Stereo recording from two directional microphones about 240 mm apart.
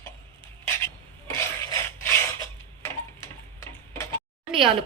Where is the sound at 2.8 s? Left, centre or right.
Centre.